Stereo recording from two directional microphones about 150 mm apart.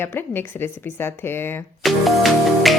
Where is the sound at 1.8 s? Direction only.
Centre (ahead or behind).